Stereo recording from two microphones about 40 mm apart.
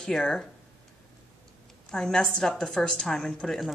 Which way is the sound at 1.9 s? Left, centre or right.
Centre.